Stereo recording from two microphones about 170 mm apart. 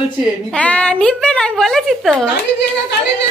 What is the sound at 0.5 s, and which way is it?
A woman's voice, 5° left (ahead or behind).